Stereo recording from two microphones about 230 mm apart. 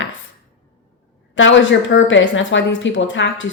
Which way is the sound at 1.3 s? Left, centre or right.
Left.